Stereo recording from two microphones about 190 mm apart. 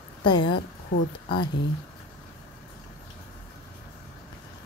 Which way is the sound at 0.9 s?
75° left (ahead or behind).